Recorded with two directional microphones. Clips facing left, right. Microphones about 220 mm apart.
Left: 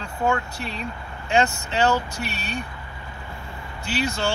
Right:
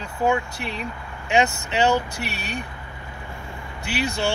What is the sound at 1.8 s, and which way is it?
Speech, 15° right (ahead or behind).